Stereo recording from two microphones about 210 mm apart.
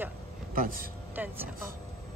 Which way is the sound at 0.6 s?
40° right (ahead or behind).